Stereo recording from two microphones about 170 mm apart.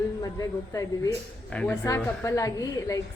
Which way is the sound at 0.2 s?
20° left (ahead or behind).